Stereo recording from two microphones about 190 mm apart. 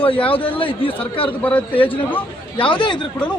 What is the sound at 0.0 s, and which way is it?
Speech, 30° left (ahead or behind).